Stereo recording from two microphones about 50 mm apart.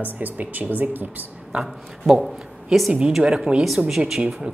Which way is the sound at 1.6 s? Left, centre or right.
Centre.